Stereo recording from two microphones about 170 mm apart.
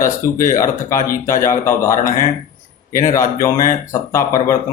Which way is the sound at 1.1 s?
55° left (ahead or behind).